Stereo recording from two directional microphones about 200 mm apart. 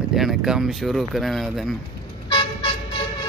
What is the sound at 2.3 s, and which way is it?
Vehicle, 25° left (ahead or behind).